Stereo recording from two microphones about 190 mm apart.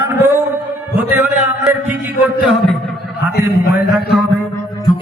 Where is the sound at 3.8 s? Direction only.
5° right (ahead or behind).